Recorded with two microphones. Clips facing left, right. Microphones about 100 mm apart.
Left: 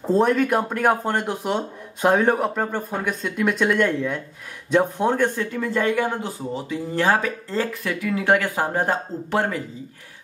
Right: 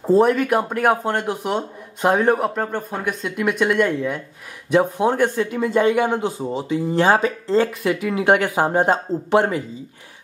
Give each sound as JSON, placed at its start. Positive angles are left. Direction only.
{"t": 0.1, "sound": "a man's voice", "side_deg": -5}